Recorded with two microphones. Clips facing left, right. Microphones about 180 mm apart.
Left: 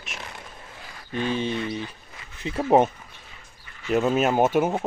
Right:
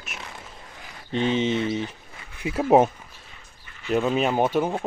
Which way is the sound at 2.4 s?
5° right (ahead or behind).